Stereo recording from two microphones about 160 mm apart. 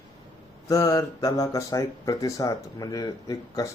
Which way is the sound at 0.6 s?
20° left (ahead or behind).